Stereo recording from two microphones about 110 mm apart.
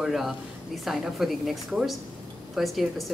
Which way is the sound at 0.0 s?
Centre (ahead or behind).